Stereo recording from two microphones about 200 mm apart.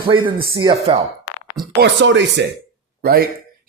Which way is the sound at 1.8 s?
65° right (ahead or behind).